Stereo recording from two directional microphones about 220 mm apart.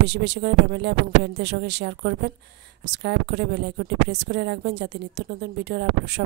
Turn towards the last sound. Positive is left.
turn(degrees=-50)  # may be behind; listen again after turning